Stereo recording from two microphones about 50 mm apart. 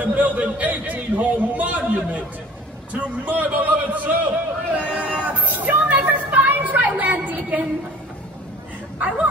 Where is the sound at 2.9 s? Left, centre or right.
Right.